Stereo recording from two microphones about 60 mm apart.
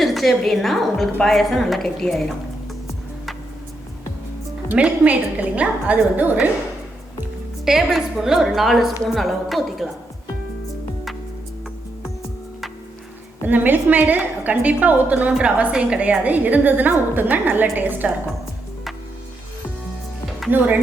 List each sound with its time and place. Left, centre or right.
0.0 s a woman's voice: centre
5.0 s a woman's voice: right
7.6 s a woman's voice: centre
13.4 s a woman's voice: right
20.5 s a woman's voice: right